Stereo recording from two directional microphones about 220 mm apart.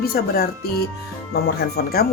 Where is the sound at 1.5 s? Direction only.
45° left (ahead or behind).